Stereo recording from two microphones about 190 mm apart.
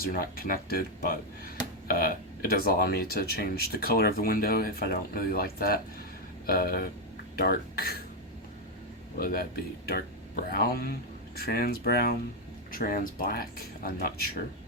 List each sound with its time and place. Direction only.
0.0 s speech: 50° left (ahead or behind)
9.1 s speech: 50° left (ahead or behind)